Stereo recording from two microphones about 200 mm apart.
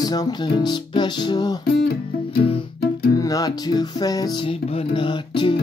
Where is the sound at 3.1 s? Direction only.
15° left (ahead or behind).